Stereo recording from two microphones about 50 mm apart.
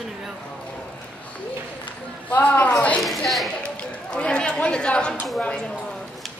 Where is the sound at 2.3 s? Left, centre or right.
Left.